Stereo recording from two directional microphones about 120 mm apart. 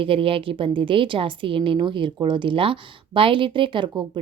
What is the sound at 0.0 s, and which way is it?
Speech, 50° right (ahead or behind).